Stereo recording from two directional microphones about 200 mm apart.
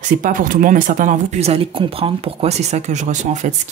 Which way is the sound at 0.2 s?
45° right (ahead or behind).